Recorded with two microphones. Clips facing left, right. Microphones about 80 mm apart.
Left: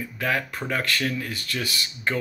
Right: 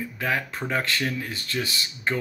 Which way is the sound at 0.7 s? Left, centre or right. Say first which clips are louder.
Even; right.